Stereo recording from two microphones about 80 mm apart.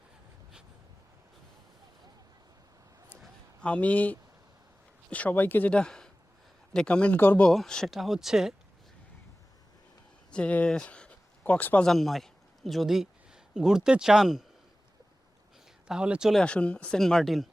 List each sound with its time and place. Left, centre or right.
3.6 s speech: centre
7.4 s speech: centre
10.3 s speech: centre
11.8 s a man's voice: centre
15.9 s speech: centre
16.3 s speech: centre